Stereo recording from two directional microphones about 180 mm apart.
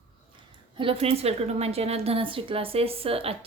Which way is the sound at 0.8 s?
30° right (ahead or behind).